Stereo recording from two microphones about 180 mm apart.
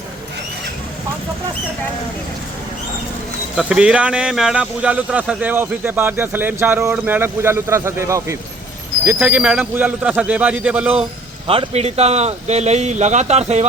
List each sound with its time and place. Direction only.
3.5 s speech: 5° right (ahead or behind)
11.4 s speech: 35° right (ahead or behind)